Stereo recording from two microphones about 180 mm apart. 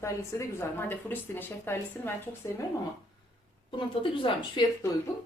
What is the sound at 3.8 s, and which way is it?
Speech, 30° left (ahead or behind).